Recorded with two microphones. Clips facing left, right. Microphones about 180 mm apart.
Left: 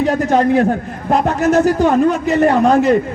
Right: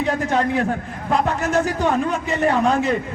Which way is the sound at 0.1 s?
40° left (ahead or behind).